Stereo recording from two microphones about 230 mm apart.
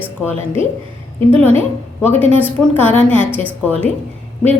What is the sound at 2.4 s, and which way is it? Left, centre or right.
Speech, centre.